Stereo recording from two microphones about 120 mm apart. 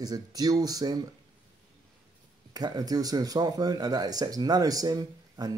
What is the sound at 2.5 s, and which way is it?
Speech, 35° right (ahead or behind).